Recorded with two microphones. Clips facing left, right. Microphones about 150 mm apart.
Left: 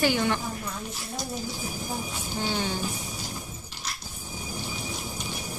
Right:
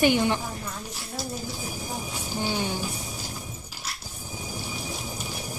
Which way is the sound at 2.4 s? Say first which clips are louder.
Right 1 dB; 15° right (ahead or behind).